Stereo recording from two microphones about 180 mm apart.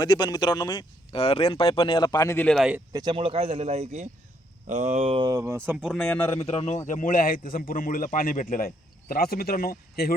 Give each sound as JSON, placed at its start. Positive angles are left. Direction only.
{"t": 0.0, "sound": "speech", "side_deg": 25}
{"t": 2.6, "sound": "speech", "side_deg": -5}
{"t": 2.9, "sound": "speech", "side_deg": -25}
{"t": 5.8, "sound": "speech", "side_deg": 0}
{"t": 6.4, "sound": "a man's voice", "side_deg": 35}
{"t": 6.8, "sound": "a man's voice", "side_deg": 45}